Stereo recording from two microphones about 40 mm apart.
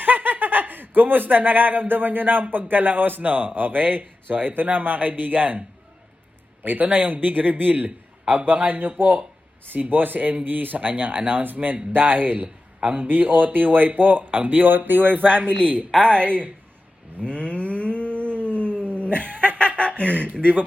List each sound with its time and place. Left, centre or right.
0.0 s speech: right
6.6 s speech: right
9.9 s speech: right
12.8 s a man's voice: right
13.1 s speech: right
16.0 s speech: left
16.2 s speech: right
17.2 s livestock: left
18.4 s a sound: left
19.0 s speech: left